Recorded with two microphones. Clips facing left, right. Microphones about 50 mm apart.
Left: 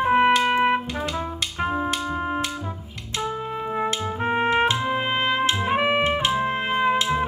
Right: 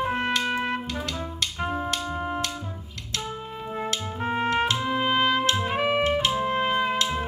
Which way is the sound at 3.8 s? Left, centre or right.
Left.